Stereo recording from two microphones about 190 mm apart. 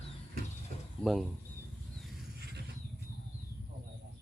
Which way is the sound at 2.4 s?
60° right (ahead or behind).